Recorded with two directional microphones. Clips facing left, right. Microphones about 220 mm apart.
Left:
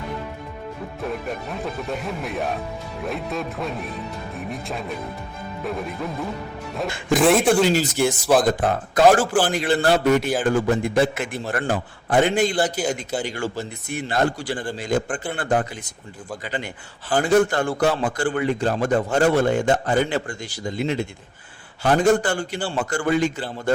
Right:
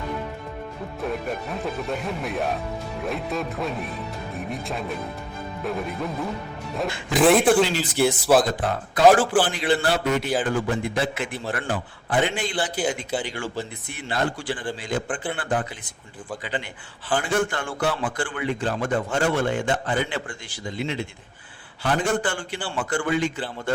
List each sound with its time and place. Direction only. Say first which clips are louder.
1.0 s speech: even; centre (ahead or behind)
9.0 s a man's voice: even; 45° left (ahead or behind)